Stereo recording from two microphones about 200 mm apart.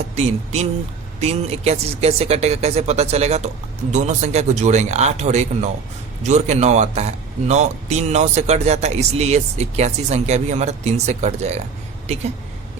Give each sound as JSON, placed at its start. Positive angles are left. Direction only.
{"t": 0.2, "sound": "a man's voice", "side_deg": -30}